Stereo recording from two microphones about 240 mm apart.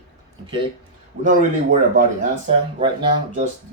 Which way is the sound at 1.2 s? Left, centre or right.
Right.